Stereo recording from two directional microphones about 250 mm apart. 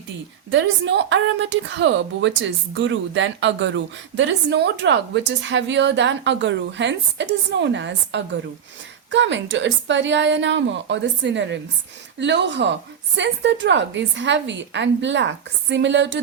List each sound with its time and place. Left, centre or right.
0.5 s a woman's voice: right